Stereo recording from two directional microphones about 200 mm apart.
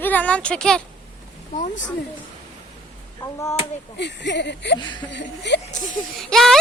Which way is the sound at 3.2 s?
15° left (ahead or behind).